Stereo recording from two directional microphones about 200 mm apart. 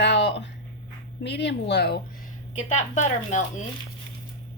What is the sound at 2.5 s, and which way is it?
Speech, 35° left (ahead or behind).